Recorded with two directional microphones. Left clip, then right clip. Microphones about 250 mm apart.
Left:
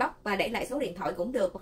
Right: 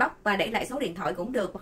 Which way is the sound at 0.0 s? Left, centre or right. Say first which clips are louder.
Right 4 dB; centre.